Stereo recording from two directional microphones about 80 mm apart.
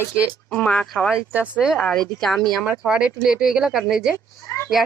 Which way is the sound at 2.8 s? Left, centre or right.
Centre.